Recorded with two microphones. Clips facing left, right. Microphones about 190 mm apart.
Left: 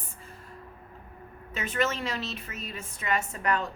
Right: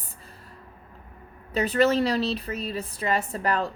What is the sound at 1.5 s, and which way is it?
A woman's voice, 35° right (ahead or behind).